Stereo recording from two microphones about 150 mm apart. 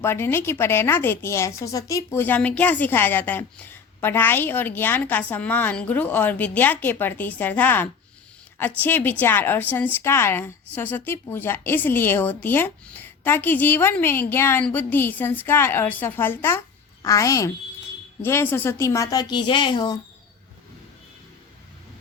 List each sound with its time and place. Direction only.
0.0 s a woman's voice: 15° left (ahead or behind); by 20.0 s 30° left (ahead or behind)